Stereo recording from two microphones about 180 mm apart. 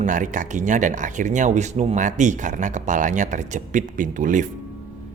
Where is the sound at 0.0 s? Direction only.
45° right (ahead or behind).